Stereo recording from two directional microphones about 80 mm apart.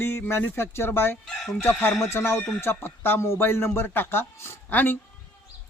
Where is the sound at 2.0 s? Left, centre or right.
Left.